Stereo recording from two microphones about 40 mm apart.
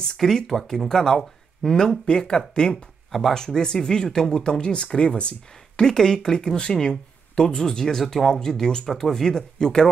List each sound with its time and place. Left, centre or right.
0.2 s speech: centre
2.7 s speech: centre
3.3 s speech: centre
5.8 s speech: centre